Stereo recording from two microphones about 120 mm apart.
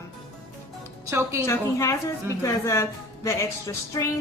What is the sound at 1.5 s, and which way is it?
Speech, 25° left (ahead or behind).